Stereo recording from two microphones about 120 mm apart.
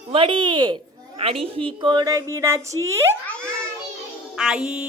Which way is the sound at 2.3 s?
25° right (ahead or behind).